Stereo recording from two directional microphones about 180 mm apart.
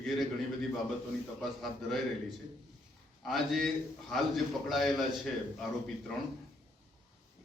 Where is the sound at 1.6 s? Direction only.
Centre (ahead or behind).